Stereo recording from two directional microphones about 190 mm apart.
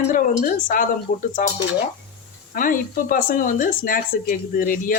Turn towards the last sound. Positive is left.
turn(degrees=50)  # may be behind; listen again after turning